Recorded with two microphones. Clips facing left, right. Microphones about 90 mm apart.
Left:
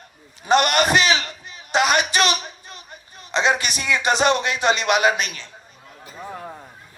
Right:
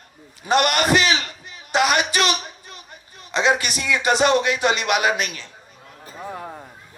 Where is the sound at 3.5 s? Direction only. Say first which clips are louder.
Even; 25° left (ahead or behind).